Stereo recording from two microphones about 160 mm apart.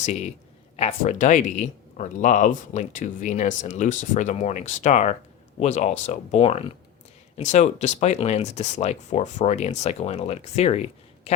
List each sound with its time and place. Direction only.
0.0 s speech: 45° left (ahead or behind)